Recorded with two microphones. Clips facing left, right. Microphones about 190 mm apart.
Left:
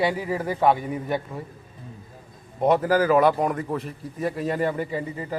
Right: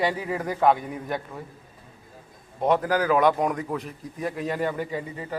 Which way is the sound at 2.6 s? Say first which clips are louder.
Left 3 dB; 5° left (ahead or behind).